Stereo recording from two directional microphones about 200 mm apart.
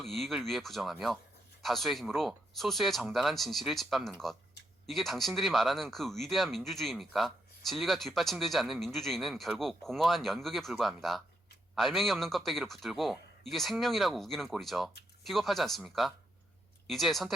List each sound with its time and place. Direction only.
0.0 s speech: centre (ahead or behind)